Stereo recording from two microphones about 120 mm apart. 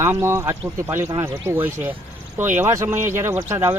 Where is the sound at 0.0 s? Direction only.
20° right (ahead or behind).